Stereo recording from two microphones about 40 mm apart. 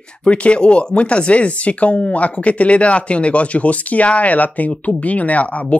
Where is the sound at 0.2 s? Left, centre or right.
Left.